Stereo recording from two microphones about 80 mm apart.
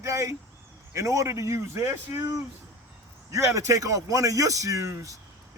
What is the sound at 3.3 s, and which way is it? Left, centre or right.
A man's voice, right.